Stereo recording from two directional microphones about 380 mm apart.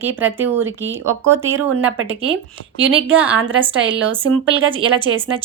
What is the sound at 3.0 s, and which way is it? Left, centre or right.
A woman's voice, centre.